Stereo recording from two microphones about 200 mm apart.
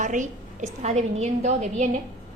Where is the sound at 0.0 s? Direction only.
40° right (ahead or behind).